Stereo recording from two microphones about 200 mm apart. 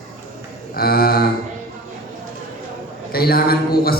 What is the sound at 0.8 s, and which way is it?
Speech, 50° left (ahead or behind).